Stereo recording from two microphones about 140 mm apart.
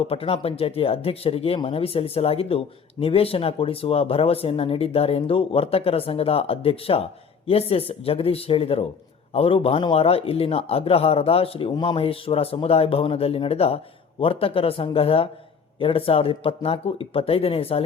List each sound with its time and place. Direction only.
0.1 s speech: 45° left (ahead or behind)